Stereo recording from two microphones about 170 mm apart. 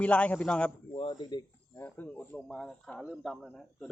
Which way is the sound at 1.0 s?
30° left (ahead or behind).